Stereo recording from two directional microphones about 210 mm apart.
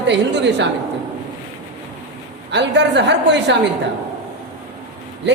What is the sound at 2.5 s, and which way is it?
A woman's voice, 55° right (ahead or behind).